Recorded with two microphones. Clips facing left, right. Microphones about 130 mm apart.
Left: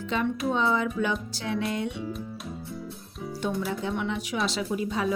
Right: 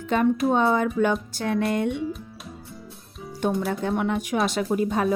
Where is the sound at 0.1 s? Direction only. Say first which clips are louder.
Right 6 dB; 50° right (ahead or behind).